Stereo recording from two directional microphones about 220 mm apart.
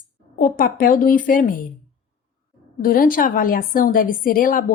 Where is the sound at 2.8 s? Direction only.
40° left (ahead or behind).